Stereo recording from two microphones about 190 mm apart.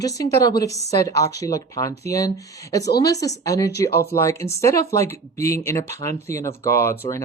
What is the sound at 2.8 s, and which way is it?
Speech, 60° left (ahead or behind).